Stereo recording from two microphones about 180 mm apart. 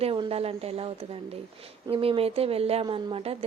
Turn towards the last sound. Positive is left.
turn(degrees=-30)  # may be behind; listen again after turning